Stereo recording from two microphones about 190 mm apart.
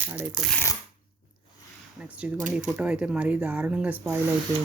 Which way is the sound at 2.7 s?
5° right (ahead or behind).